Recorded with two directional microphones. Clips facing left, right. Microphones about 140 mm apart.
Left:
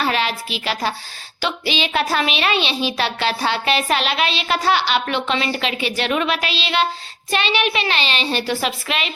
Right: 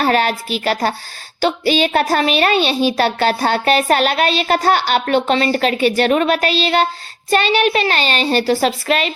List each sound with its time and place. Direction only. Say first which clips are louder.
0.0 s a child's voice: right 5 dB; 45° right (ahead or behind)